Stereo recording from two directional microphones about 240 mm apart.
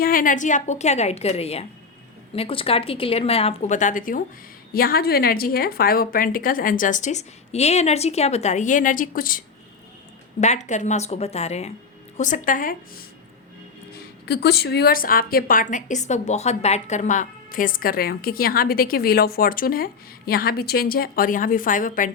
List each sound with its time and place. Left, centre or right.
0.0 s a woman's voice: left
10.4 s a woman's voice: left
14.3 s a woman's voice: left